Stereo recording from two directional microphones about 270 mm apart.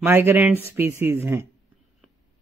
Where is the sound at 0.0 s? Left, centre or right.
Centre.